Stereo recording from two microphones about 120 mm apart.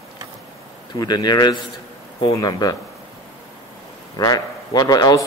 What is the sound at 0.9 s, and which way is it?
A man's voice, 35° left (ahead or behind).